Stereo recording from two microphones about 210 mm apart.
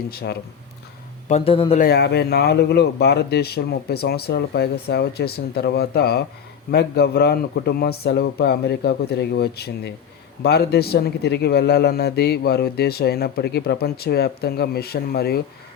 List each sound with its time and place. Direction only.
0.1 s speech: 50° left (ahead or behind)
1.3 s speech: 25° left (ahead or behind)
1.8 s speech: 50° left (ahead or behind)